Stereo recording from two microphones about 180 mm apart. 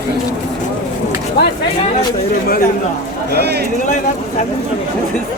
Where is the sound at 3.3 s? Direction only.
65° right (ahead or behind).